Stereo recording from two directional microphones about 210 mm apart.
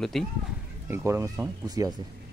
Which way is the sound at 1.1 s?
15° right (ahead or behind).